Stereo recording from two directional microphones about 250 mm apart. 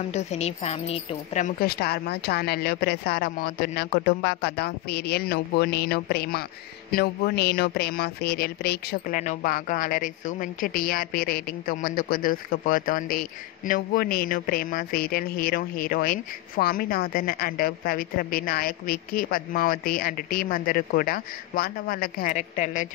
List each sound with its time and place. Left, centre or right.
0.1 s a man's voice: left